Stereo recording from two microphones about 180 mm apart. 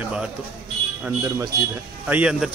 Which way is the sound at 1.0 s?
15° right (ahead or behind).